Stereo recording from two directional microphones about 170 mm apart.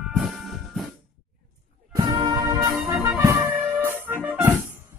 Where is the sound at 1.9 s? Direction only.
20° right (ahead or behind).